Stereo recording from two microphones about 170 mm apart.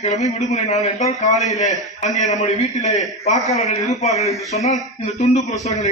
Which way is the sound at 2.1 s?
45° left (ahead or behind).